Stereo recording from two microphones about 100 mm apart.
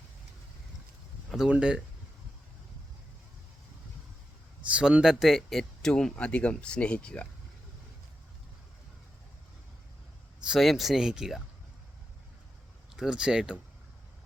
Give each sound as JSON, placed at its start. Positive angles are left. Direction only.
{"t": 1.3, "sound": "speech", "side_deg": -5}
{"t": 4.7, "sound": "speech", "side_deg": -10}
{"t": 10.4, "sound": "speech", "side_deg": -5}
{"t": 13.0, "sound": "speech", "side_deg": -10}